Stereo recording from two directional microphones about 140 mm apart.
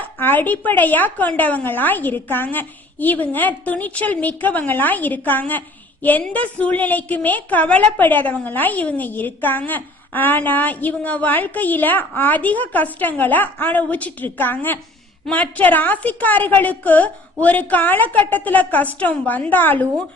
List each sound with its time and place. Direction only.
0.2 s a woman's voice: 15° left (ahead or behind)